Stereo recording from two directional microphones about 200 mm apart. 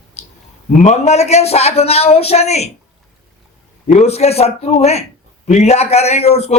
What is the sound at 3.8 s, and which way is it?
Speech, 35° left (ahead or behind).